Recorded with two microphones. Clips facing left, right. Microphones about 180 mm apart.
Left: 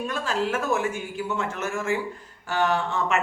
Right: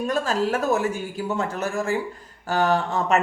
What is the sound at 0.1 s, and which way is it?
Speech, 40° right (ahead or behind).